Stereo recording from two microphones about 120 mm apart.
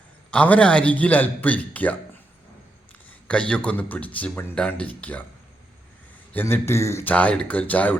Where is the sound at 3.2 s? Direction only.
10° left (ahead or behind).